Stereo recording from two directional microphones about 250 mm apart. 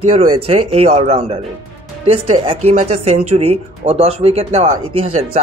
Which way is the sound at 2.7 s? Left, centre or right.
Right.